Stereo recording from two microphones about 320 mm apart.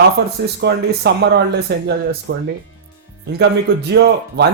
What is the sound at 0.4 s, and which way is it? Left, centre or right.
Speech, right.